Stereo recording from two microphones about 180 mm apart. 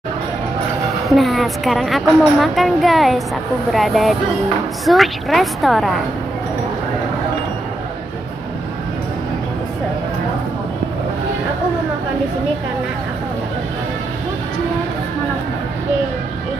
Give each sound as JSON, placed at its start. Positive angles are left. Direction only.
{"t": 1.0, "sound": "a woman's voice", "side_deg": 0}